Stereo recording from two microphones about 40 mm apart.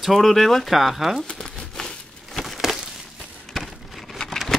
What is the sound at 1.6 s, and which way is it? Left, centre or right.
Crumpling, centre.